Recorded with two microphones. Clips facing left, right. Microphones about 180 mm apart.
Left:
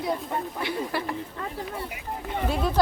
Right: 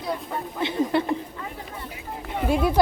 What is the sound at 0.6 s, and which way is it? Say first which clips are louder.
Speech: right 10 dB; 25° right (ahead or behind).